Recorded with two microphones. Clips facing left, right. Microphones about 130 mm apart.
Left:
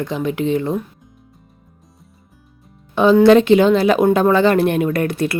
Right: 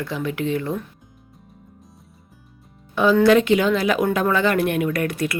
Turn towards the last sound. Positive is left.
turn(degrees=30)  # may be behind; listen again after turning